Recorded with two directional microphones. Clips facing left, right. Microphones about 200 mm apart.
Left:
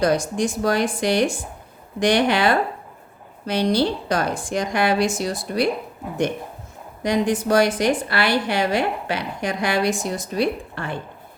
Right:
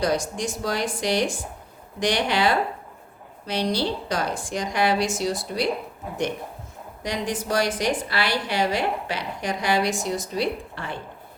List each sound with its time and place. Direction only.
0.0 s a woman's voice: 55° left (ahead or behind)
7.0 s a woman's voice: 55° left (ahead or behind)